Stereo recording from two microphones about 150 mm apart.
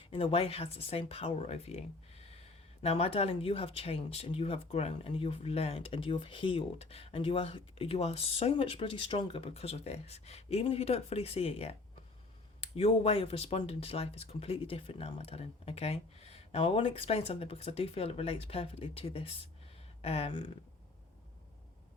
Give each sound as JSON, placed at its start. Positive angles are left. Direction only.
{"t": 0.1, "sound": "speech", "side_deg": 35}